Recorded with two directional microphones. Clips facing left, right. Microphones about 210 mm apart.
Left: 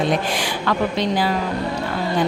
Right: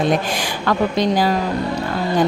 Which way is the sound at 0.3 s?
45° right (ahead or behind).